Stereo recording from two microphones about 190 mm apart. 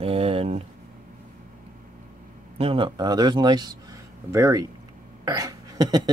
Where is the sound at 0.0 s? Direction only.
30° right (ahead or behind).